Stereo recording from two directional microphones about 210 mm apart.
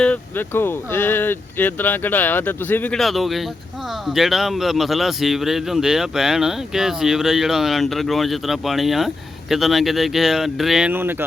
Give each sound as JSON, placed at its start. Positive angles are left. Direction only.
{"t": 0.0, "sound": "a man's voice", "side_deg": 10}